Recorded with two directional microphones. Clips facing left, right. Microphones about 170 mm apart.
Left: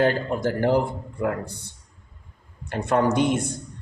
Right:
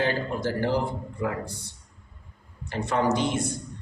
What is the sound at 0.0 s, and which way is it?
Speech, 50° left (ahead or behind).